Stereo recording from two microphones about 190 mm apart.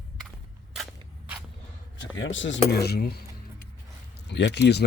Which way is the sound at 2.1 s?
80° left.